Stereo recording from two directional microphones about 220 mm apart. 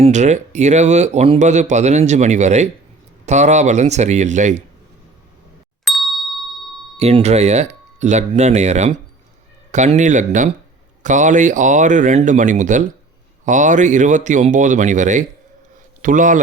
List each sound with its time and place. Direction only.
0.0 s speech: 30° right (ahead or behind)
5.8 s ding: centre (ahead or behind)
6.9 s a man's voice: 30° right (ahead or behind)